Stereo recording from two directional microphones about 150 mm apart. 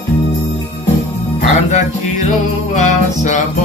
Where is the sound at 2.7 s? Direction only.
55° left (ahead or behind).